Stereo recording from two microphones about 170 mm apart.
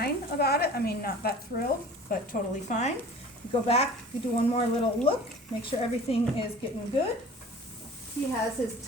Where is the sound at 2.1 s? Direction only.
50° left (ahead or behind).